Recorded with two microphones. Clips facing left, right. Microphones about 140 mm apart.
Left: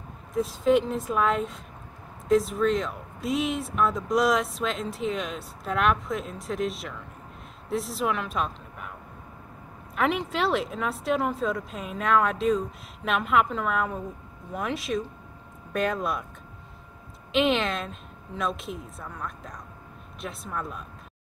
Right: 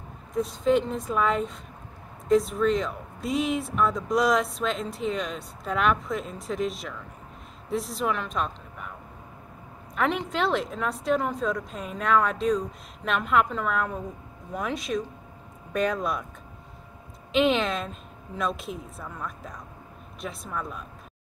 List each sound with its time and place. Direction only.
0.3 s a woman's voice: centre (ahead or behind)
9.9 s speech: centre (ahead or behind)
17.3 s speech: centre (ahead or behind)